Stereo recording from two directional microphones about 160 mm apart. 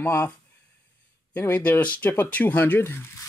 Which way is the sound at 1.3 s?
15° left (ahead or behind).